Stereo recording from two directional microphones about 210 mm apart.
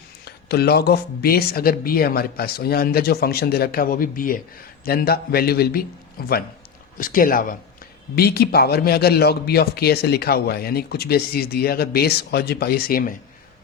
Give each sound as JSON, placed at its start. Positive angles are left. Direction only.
{"t": 0.3, "sound": "a man's voice", "side_deg": 50}